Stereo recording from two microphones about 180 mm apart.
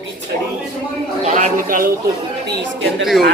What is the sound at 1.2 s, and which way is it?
Speech, 45° right (ahead or behind).